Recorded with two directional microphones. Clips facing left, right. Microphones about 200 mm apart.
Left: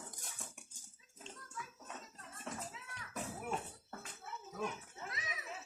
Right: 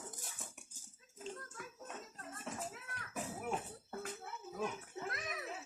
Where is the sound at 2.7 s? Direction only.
55° right (ahead or behind).